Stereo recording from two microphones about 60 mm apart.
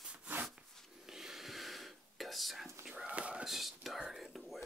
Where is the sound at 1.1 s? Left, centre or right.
Centre.